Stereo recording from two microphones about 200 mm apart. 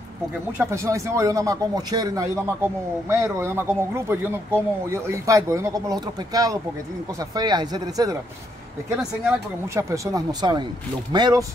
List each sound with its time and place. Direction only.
0.6 s speech: 15° right (ahead or behind)
9.8 s speech: 15° right (ahead or behind)